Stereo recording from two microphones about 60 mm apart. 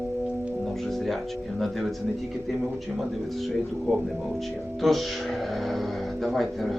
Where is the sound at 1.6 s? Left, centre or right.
Centre.